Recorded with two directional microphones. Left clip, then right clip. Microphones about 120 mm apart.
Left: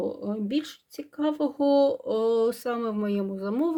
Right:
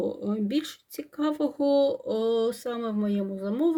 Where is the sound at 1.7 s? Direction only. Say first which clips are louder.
Left 2 dB; 20° left (ahead or behind).